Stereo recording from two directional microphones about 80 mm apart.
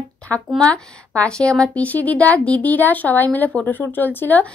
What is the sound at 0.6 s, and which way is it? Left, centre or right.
A woman's voice, centre.